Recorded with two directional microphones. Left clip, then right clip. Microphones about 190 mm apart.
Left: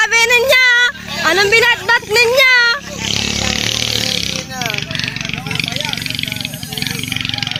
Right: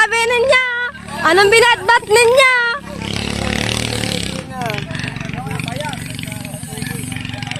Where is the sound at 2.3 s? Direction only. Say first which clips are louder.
Left 1 dB; 10° right (ahead or behind).